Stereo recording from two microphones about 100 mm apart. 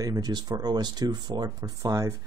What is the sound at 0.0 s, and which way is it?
Speech, 40° right (ahead or behind).